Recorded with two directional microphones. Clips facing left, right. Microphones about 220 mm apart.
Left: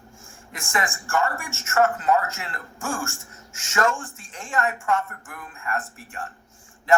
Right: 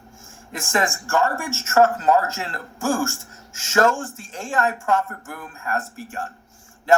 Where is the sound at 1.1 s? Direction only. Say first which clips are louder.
Right 2 dB; 40° right (ahead or behind).